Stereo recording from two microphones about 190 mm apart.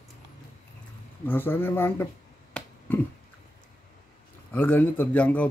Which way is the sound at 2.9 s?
10° left (ahead or behind).